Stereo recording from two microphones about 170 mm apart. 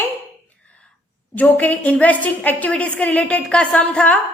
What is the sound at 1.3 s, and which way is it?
A woman's voice, 10° left (ahead or behind).